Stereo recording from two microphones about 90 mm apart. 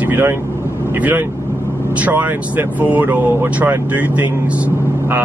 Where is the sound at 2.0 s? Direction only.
20° right (ahead or behind).